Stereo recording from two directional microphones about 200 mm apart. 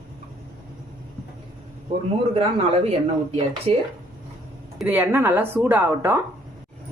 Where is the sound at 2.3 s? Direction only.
30° right (ahead or behind).